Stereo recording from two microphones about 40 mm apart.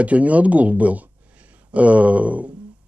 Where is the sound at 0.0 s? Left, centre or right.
Right.